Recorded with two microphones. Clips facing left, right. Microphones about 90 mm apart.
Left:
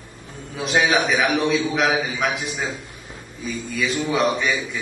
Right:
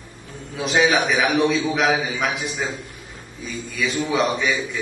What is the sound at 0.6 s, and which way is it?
A man's voice, centre (ahead or behind).